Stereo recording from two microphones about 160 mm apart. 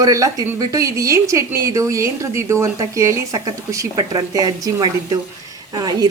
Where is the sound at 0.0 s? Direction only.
20° right (ahead or behind).